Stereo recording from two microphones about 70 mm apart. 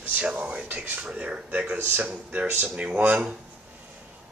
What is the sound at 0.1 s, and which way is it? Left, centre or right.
Speech, right.